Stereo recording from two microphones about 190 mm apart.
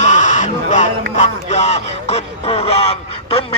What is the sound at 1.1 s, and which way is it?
Music, 35° left (ahead or behind).